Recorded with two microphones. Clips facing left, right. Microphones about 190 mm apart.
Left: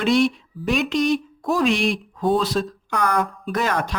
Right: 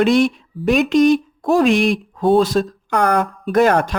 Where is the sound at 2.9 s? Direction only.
65° right (ahead or behind); by 3.9 s 50° right (ahead or behind).